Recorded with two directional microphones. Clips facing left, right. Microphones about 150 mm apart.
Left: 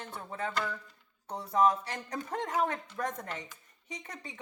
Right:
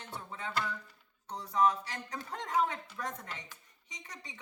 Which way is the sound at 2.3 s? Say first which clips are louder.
Left 1 dB; 50° left (ahead or behind).